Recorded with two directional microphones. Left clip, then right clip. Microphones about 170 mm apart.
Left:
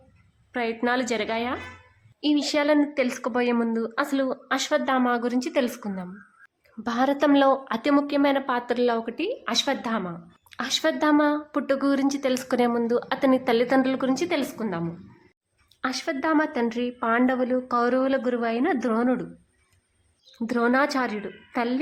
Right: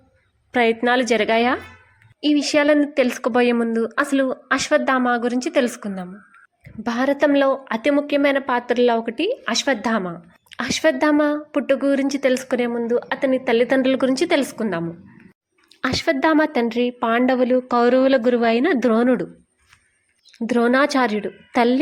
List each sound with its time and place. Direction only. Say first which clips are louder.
0.5 s a woman's voice: right 8 dB; 30° right (ahead or behind)
2.2 s a woman's voice: right 6 dB; 20° right (ahead or behind)
10.5 s a woman's voice: right 6 dB; 15° right (ahead or behind)
12.0 s a woman's voice: right 5 dB; 20° right (ahead or behind)
12.5 s a woman's voice: right 2 dB; 5° right (ahead or behind); by 19.3 s 25° right (ahead or behind)
20.5 s a woman's voice: right 5 dB; 20° right (ahead or behind)